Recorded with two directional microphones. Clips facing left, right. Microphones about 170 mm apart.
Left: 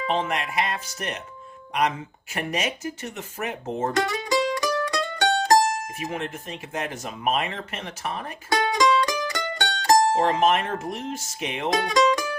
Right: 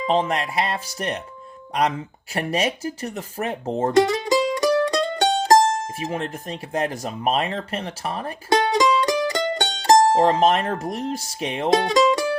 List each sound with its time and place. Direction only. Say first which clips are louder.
0.0 s speech: right 4 dB; 35° right (ahead or behind)
2.3 s speech: right 5 dB; 35° right (ahead or behind)